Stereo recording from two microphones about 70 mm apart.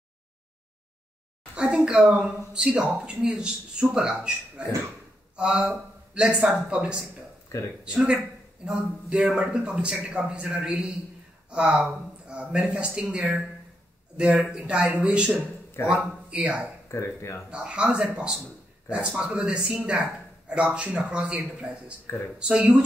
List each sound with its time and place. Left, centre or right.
1.5 s a sound: centre
1.9 s a man's voice: centre
16.9 s speech: left
17.5 s a man's voice: centre